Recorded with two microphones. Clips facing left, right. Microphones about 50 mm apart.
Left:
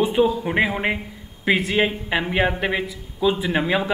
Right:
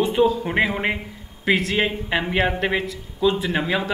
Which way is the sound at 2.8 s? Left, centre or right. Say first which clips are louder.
Even; centre.